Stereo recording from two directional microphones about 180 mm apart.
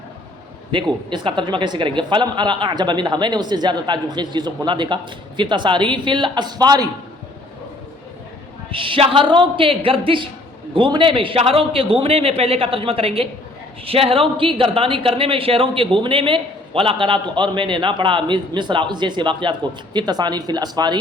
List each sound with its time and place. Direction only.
0.7 s a woman's voice: 25° right (ahead or behind)
8.7 s a woman's voice: 30° right (ahead or behind)